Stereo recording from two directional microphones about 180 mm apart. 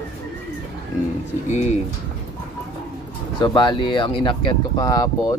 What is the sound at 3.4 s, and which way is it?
Speech, 25° left (ahead or behind).